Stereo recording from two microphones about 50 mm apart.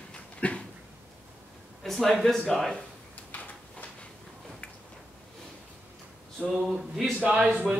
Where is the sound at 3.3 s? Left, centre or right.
Left.